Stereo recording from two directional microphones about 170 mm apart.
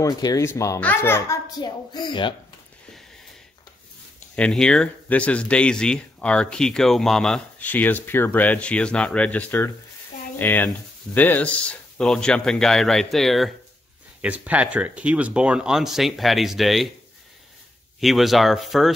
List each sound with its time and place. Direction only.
0.0 s speech: 20° left (ahead or behind)
1.6 s a woman's voice: 25° left (ahead or behind)
4.4 s speech: 5° left (ahead or behind)
18.0 s speech: centre (ahead or behind)